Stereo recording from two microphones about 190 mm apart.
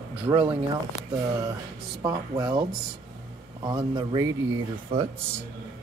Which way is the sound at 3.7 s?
20° right (ahead or behind).